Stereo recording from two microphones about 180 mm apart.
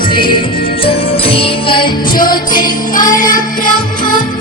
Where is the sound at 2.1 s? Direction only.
50° left (ahead or behind).